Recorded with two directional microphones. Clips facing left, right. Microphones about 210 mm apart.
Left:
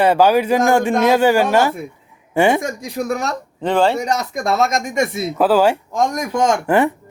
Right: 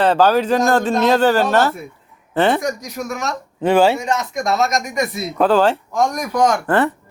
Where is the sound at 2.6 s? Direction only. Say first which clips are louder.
Left 1 dB; 30° left (ahead or behind).